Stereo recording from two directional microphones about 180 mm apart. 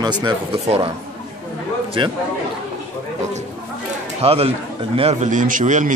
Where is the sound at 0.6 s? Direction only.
35° right (ahead or behind).